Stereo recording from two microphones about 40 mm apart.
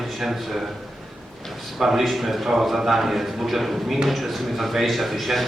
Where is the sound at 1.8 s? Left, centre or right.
Centre.